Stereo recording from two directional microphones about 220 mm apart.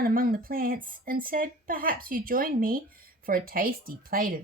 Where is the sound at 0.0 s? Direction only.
40° right (ahead or behind).